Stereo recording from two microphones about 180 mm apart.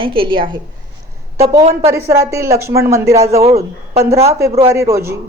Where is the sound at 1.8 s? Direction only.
15° right (ahead or behind).